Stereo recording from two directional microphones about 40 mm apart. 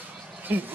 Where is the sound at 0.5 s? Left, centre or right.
Right.